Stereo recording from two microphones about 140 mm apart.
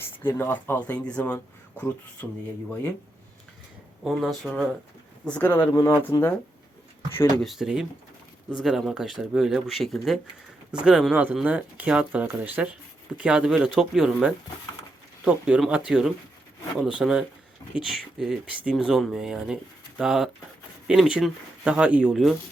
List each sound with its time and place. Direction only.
0.3 s speech: 15° left (ahead or behind)
4.0 s speech: centre (ahead or behind); by 6.4 s 20° left (ahead or behind)
7.4 s speech: 5° right (ahead or behind)